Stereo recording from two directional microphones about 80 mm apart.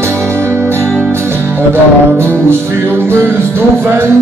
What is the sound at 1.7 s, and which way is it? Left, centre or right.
Music, right.